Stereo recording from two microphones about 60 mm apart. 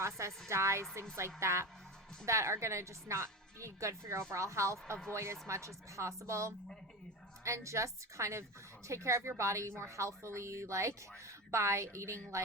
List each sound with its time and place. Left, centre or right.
0.0 s a woman's voice: right